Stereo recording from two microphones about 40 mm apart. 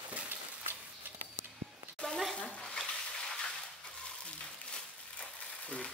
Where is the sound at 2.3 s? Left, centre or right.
Left.